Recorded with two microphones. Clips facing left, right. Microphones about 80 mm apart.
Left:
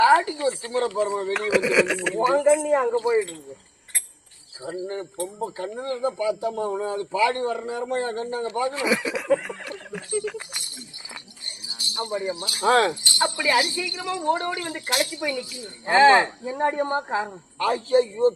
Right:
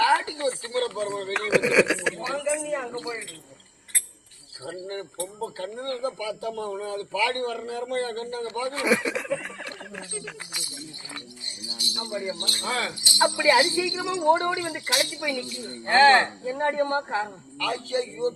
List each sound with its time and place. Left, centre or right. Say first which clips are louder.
0.0 s snake: left 5 dB; left
0.7 s a man's voice: left 4 dB; left
1.3 s speech: right 3 dB; centre
2.2 s speech: left 9 dB; left
4.6 s a man's voice: left 4 dB; centre
8.8 s speech: even; centre
11.8 s music: left 4 dB; left
12.3 s speech: left 2 dB; centre
12.6 s speech: left 11 dB; left
13.0 s a man's voice: right 2 dB; centre
14.8 s a man's voice: left 2 dB; centre
17.6 s a man's voice: left 7 dB; left